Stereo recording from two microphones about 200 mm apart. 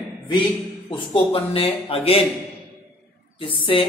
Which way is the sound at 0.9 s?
25° left (ahead or behind).